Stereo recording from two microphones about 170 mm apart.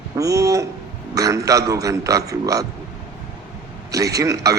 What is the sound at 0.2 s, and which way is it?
A man's voice, 20° right (ahead or behind).